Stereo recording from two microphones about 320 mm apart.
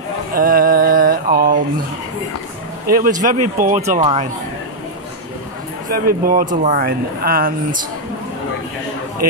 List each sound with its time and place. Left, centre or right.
0.3 s music: right
2.9 s speech: right
5.9 s speech: right